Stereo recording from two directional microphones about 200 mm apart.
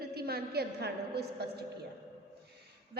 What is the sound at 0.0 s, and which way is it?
A woman's voice, 50° right (ahead or behind).